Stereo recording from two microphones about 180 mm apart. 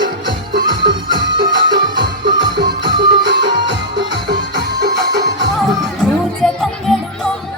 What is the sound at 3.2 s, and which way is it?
Music, 75° right (ahead or behind).